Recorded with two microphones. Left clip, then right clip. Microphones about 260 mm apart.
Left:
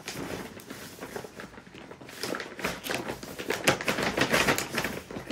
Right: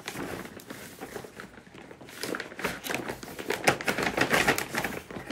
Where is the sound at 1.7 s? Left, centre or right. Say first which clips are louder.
Even; centre.